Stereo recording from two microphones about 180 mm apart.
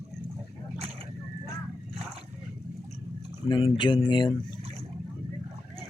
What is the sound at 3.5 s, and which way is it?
Speech, 30° left (ahead or behind).